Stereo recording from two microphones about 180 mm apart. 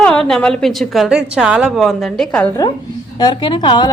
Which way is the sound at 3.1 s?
25° left (ahead or behind).